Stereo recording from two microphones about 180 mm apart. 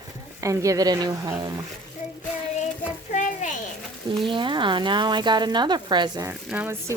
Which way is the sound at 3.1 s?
45° left (ahead or behind).